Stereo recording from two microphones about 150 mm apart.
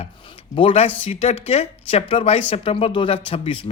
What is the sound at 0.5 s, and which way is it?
Speech, 40° left (ahead or behind).